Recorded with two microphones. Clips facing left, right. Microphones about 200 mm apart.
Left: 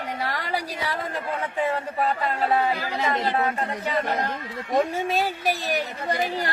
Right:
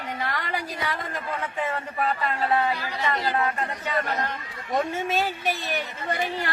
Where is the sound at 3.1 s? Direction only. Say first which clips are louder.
Left 1 dB; 25° left (ahead or behind).